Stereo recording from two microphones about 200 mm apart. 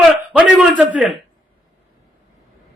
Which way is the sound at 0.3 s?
5° right (ahead or behind).